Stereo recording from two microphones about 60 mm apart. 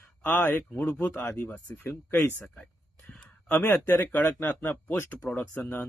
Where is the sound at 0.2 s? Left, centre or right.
Left.